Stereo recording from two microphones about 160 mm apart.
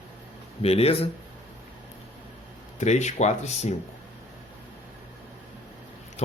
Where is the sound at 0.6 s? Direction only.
40° left (ahead or behind).